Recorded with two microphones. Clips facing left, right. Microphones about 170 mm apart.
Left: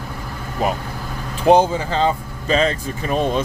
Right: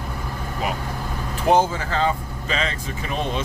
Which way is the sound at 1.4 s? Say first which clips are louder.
Left 5 dB; 20° left (ahead or behind).